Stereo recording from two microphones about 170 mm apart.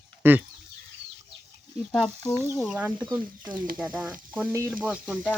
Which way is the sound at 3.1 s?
25° right (ahead or behind).